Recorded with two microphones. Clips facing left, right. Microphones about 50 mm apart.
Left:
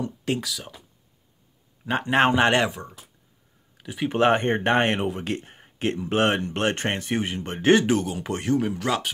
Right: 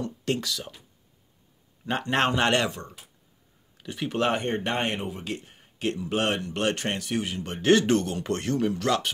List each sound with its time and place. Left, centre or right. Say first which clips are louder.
0.0 s speech: left 1 dB; centre
1.9 s speech: left 4 dB; centre
4.1 s speech: left 5 dB; left
7.8 s speech: left 1 dB; centre